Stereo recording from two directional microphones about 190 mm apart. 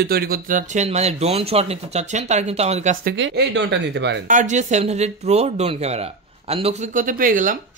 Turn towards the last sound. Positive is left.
turn(degrees=-45)  # may be behind; listen again after turning